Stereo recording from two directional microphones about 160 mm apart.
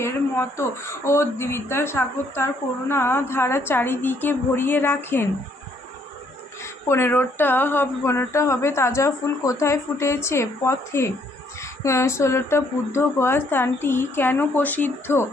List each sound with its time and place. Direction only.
0.0 s speech: 15° left (ahead or behind)
6.8 s speech: 15° left (ahead or behind)